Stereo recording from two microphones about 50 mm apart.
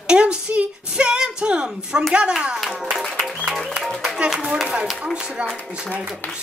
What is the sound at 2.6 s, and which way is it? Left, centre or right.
Music, centre.